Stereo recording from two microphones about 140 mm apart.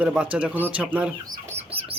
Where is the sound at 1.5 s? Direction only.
45° right (ahead or behind).